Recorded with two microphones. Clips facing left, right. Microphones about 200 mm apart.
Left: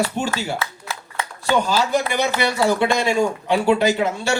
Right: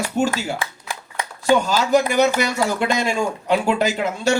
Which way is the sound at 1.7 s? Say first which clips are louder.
Right 2 dB; 40° right (ahead or behind).